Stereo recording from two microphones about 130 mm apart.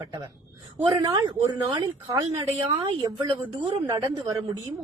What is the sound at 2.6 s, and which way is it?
Speech, 35° right (ahead or behind).